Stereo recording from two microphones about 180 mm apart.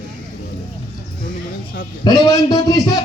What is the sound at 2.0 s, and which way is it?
Speech, 20° left (ahead or behind).